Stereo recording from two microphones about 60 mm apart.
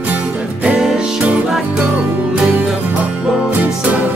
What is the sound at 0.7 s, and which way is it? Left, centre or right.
Music, centre.